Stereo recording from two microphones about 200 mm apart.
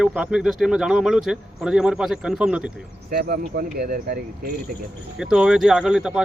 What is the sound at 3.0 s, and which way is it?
Speech, 50° right (ahead or behind).